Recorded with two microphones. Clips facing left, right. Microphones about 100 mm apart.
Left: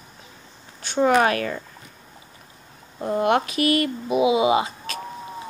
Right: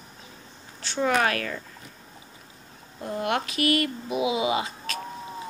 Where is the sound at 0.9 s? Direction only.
20° left (ahead or behind).